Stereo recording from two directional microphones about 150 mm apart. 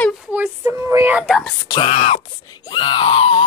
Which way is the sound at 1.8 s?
40° left (ahead or behind).